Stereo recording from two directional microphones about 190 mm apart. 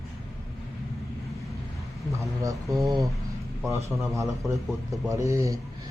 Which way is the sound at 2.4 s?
15° right (ahead or behind).